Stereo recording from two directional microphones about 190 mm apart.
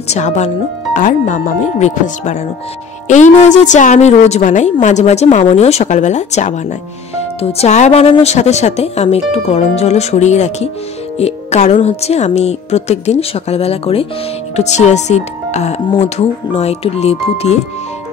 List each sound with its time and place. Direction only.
0.1 s a woman's voice: 35° left (ahead or behind)